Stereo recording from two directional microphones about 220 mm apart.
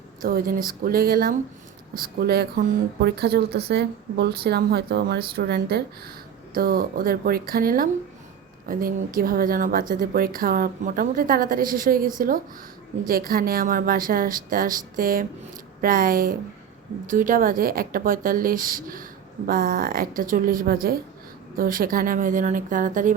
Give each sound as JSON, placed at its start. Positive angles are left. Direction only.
{"t": 0.2, "sound": "a woman's voice", "side_deg": -40}